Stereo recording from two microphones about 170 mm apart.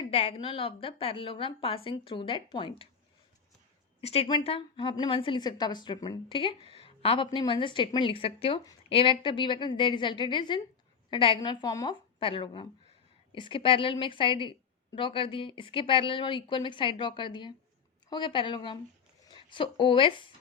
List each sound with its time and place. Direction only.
0.0 s a woman's voice: 35° left (ahead or behind)
4.0 s a woman's voice: 35° left (ahead or behind)